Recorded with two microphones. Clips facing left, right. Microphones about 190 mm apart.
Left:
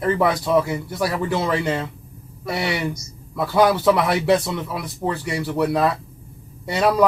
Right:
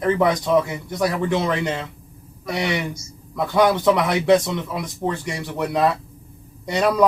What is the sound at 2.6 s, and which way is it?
Speech, 40° left (ahead or behind).